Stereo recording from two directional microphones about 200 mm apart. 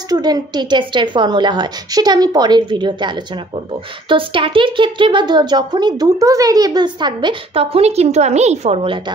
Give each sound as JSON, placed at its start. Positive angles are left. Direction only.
{"t": 0.1, "sound": "speech", "side_deg": -20}